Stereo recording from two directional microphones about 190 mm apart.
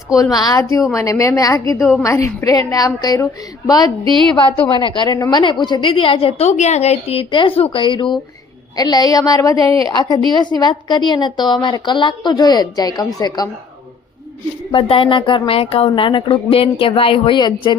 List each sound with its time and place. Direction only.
0.2 s a woman's voice: 20° left (ahead or behind)
14.7 s a woman's voice: 30° left (ahead or behind)